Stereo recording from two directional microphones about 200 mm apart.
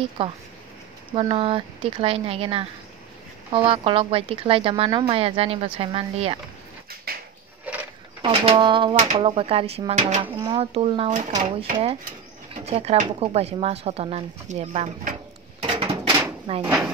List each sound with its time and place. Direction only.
0.2 s speech: 30° right (ahead or behind)
7.1 s a sound: 50° right (ahead or behind)
8.2 s speech: 25° right (ahead or behind)
11.1 s speech: 40° right (ahead or behind)
15.6 s drawer open or close: 25° right (ahead or behind)